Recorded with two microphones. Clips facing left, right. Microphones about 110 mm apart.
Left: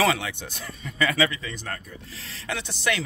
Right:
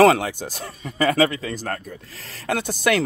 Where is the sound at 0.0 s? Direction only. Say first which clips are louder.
Right 9 dB; 50° right (ahead or behind).